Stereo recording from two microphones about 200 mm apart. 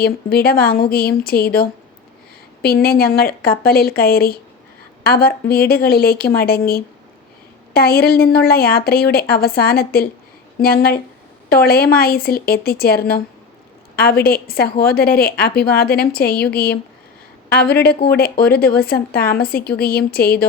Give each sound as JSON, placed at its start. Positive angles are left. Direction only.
{"t": 0.0, "sound": "a woman's voice", "side_deg": 50}